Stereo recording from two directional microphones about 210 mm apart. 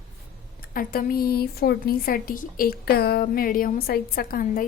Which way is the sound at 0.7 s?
45° left (ahead or behind).